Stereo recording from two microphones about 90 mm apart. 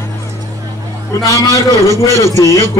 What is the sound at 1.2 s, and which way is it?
Speech, 40° left (ahead or behind).